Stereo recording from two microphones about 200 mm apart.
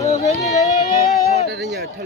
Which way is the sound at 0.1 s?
35° left (ahead or behind).